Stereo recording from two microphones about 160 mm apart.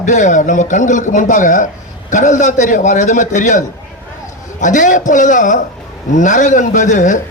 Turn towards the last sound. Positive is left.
turn(degrees=50)  # may be behind; listen again after turning